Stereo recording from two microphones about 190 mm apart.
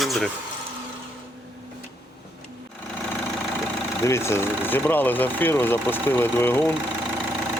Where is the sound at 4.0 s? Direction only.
15° left (ahead or behind).